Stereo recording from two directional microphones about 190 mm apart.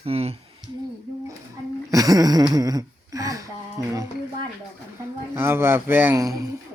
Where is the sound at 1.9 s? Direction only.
20° right (ahead or behind).